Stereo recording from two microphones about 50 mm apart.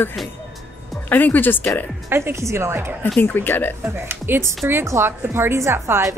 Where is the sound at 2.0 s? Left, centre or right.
Right.